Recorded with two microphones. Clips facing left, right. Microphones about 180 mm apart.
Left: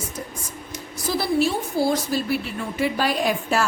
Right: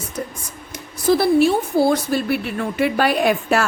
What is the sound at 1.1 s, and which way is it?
A woman's voice, 60° right (ahead or behind).